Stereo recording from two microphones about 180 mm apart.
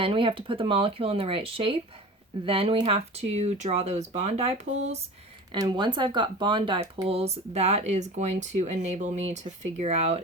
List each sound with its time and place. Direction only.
0.0 s speech: 30° right (ahead or behind)
5.5 s speech: 25° right (ahead or behind)